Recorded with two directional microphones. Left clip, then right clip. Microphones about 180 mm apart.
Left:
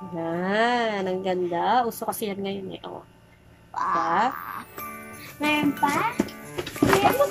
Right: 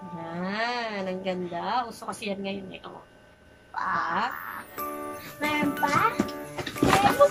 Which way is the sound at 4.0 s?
40° left (ahead or behind).